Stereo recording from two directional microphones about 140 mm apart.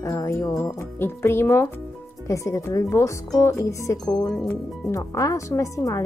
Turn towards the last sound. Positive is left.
turn(degrees=20)  # may be behind; listen again after turning